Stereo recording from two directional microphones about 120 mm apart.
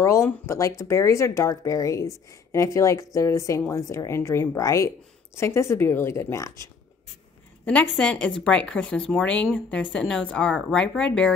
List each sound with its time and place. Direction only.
0.0 s speech: 25° left (ahead or behind)
7.6 s a woman's voice: 10° left (ahead or behind)